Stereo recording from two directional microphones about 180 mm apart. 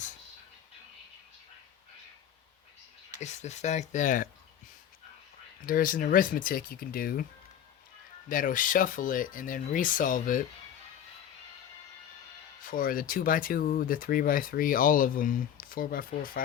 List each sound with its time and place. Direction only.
3.2 s speech: 40° left (ahead or behind)
5.6 s speech: 50° left (ahead or behind)
8.3 s speech: 50° left (ahead or behind)
12.6 s speech: 50° left (ahead or behind)